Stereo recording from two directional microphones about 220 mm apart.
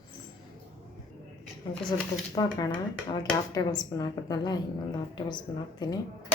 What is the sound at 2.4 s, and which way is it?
A woman's voice, 20° left (ahead or behind).